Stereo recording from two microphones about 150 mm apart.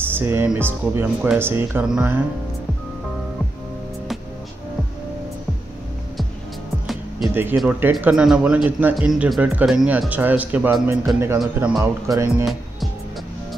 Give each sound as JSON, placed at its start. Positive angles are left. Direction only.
{"t": 0.0, "sound": "music", "side_deg": -15}
{"t": 0.6, "sound": "speech", "side_deg": -15}
{"t": 7.5, "sound": "speech", "side_deg": -5}
{"t": 11.3, "sound": "speech", "side_deg": 0}
{"t": 11.8, "sound": "speech", "side_deg": -20}